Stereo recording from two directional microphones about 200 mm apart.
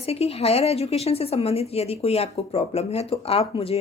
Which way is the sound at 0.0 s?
30° left (ahead or behind).